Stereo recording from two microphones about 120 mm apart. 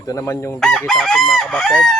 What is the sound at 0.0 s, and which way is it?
Chicken, 25° left (ahead or behind).